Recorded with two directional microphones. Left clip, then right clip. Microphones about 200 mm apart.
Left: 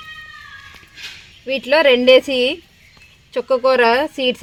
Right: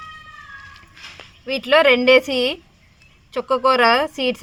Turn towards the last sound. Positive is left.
turn(degrees=30)  # may be behind; listen again after turning